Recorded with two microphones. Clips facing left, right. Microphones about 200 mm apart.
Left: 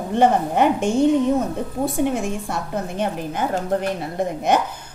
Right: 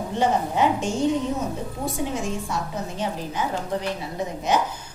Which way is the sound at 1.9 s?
55° left (ahead or behind).